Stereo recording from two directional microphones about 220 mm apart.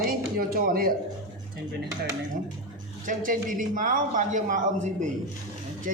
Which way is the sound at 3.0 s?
35° right (ahead or behind).